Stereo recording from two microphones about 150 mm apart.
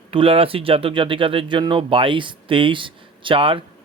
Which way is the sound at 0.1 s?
35° right (ahead or behind).